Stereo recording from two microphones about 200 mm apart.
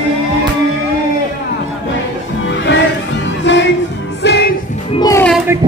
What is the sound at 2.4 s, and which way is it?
Music, 65° left (ahead or behind).